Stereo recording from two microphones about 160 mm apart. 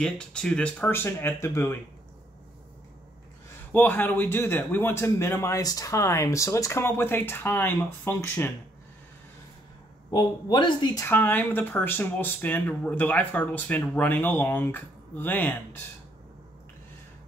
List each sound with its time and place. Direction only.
0.0 s speech: 5° left (ahead or behind)
3.7 s speech: 10° left (ahead or behind)
10.1 s speech: 30° left (ahead or behind)
11.1 s speech: 10° left (ahead or behind)